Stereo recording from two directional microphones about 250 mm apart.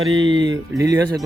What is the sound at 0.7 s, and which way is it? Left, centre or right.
Speech, centre.